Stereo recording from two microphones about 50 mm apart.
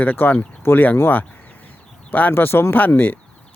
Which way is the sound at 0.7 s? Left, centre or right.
Left.